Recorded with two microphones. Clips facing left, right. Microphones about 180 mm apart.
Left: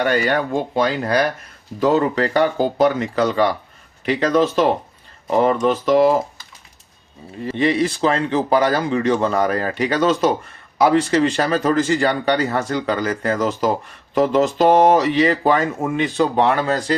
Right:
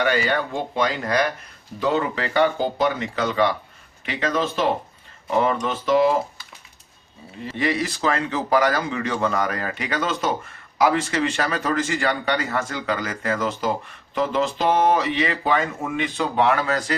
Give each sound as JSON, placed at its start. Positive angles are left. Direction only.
{"t": 0.0, "sound": "speech", "side_deg": 45}
{"t": 1.0, "sound": "speech", "side_deg": 35}
{"t": 7.5, "sound": "speech", "side_deg": 25}